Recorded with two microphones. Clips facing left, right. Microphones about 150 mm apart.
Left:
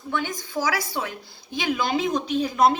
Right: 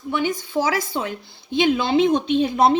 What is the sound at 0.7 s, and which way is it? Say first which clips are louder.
A woman's voice: right 4 dB; 25° right (ahead or behind).